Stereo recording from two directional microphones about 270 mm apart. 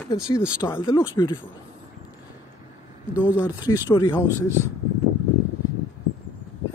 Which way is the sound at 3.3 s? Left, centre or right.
Centre.